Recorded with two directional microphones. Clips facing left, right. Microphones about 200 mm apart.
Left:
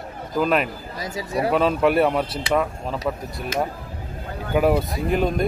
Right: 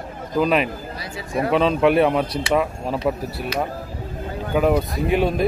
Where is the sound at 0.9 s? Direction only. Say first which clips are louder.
Left 2 dB; 40° left (ahead or behind).